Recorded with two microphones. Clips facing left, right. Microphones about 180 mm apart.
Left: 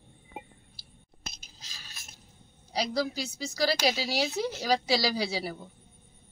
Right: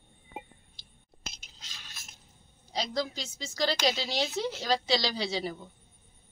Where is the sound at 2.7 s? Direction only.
10° left (ahead or behind).